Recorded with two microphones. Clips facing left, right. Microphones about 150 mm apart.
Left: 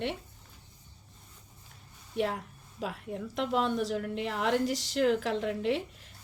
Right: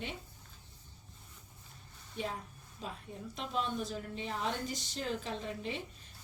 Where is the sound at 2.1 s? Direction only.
85° left.